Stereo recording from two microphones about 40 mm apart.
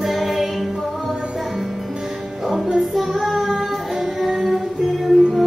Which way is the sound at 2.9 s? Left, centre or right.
Centre.